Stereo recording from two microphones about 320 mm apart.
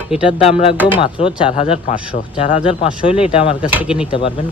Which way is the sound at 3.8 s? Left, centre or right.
Centre.